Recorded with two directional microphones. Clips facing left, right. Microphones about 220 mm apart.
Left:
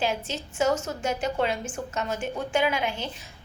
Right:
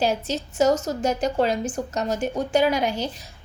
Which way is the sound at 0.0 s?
40° right (ahead or behind).